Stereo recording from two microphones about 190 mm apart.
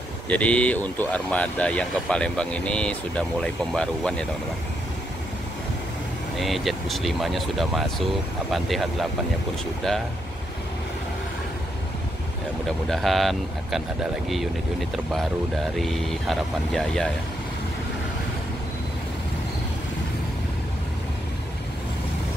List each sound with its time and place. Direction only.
0.3 s speech: 5° left (ahead or behind)
6.3 s speech: centre (ahead or behind)
12.8 s speech: centre (ahead or behind)
15.7 s speech: centre (ahead or behind)